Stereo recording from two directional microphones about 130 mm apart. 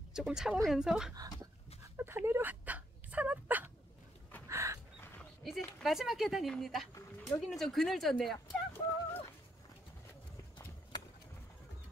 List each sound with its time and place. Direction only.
0.1 s speech: 5° right (ahead or behind)
2.0 s a sound: 20° right (ahead or behind)
5.2 s a sound: centre (ahead or behind)
5.8 s speech: centre (ahead or behind)
6.9 s speech: 25° left (ahead or behind)
7.3 s speech: centre (ahead or behind)
8.7 s fowl: 15° left (ahead or behind)